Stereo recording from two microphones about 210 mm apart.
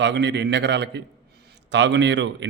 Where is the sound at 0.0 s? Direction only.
55° right (ahead or behind).